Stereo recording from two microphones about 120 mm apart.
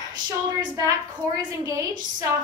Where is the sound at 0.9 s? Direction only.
30° right (ahead or behind).